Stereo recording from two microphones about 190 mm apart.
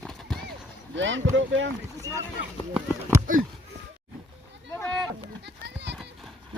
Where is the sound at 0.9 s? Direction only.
80° right.